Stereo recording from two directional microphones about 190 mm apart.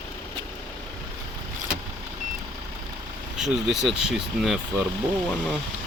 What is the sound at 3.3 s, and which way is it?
Speech, centre (ahead or behind).